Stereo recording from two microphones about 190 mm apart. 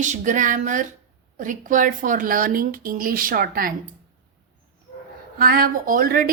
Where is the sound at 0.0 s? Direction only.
40° right (ahead or behind).